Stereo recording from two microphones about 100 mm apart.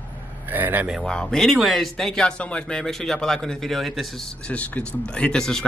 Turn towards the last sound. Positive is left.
turn(degrees=5)  # may be behind; listen again after turning